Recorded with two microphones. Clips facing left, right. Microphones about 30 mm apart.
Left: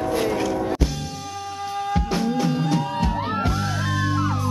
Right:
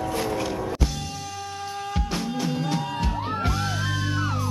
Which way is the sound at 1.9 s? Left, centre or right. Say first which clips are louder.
Left 6 dB; centre.